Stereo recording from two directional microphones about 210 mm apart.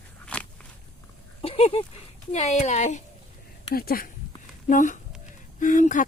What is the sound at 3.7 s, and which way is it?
Speech, 45° left (ahead or behind).